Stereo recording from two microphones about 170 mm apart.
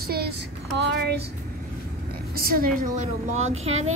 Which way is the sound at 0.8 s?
80° right.